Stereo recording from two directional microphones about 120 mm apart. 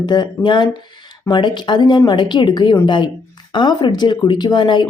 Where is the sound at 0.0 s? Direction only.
35° left (ahead or behind).